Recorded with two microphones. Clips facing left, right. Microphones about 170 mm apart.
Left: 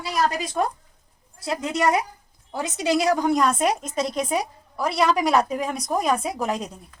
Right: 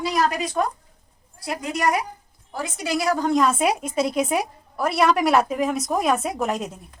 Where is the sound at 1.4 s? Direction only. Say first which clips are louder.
Left 1 dB; 25° left (ahead or behind).